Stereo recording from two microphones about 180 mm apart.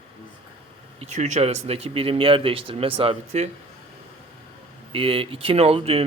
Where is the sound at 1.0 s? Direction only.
35° right (ahead or behind).